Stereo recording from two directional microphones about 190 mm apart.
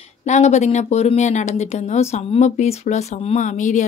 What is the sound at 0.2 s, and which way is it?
Speech, 35° left (ahead or behind).